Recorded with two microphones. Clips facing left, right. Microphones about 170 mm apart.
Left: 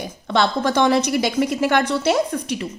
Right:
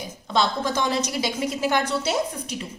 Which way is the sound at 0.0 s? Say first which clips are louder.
Left 4 dB; 65° left (ahead or behind).